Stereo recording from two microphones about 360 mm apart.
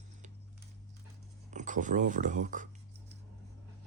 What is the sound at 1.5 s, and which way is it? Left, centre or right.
Speech, right.